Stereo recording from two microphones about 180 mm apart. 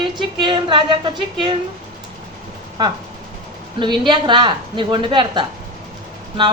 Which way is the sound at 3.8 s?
25° right (ahead or behind).